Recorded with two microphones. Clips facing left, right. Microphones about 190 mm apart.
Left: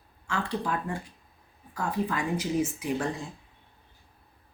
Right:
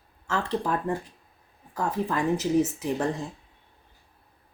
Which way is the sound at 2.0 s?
40° right (ahead or behind).